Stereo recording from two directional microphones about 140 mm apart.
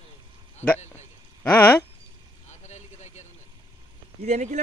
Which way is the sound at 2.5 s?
55° left (ahead or behind).